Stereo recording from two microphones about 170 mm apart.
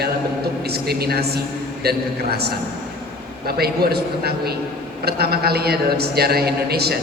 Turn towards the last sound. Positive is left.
turn(degrees=-70)  # may be behind; listen again after turning